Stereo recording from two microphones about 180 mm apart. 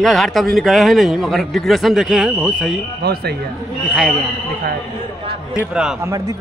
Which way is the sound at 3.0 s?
65° right (ahead or behind).